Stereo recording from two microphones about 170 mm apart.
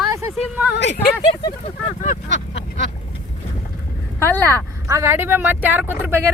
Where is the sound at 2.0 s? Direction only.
45° left (ahead or behind).